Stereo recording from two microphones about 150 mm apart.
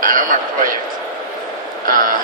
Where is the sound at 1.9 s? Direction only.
65° right (ahead or behind).